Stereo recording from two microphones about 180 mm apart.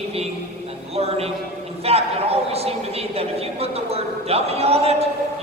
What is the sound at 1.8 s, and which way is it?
A man's voice, 35° right (ahead or behind).